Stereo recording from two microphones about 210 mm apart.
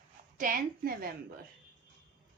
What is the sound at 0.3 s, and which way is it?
Speech, 40° right (ahead or behind).